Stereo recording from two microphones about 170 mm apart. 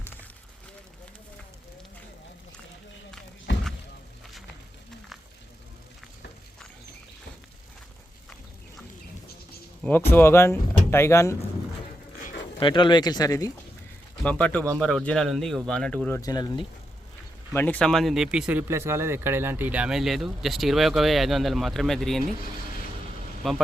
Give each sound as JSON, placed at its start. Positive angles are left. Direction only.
{"t": 3.5, "sound": "a sound", "side_deg": 90}
{"t": 10.1, "sound": "speech", "side_deg": 15}
{"t": 12.5, "sound": "speech", "side_deg": 30}
{"t": 14.3, "sound": "speech", "side_deg": 10}
{"t": 16.2, "sound": "speech", "side_deg": 25}
{"t": 17.5, "sound": "speech", "side_deg": 10}
{"t": 18.7, "sound": "speech", "side_deg": -15}
{"t": 23.4, "sound": "speech", "side_deg": 0}